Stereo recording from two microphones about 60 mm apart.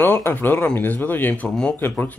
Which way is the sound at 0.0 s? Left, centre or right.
Left.